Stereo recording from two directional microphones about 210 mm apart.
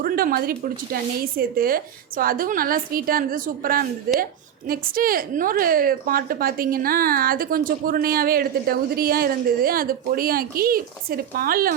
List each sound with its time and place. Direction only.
0.0 s a woman's voice: 45° right (ahead or behind)